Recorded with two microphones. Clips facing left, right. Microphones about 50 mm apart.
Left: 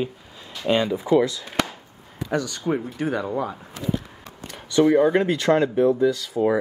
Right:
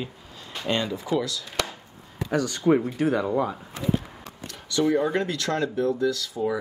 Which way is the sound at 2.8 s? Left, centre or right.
Centre.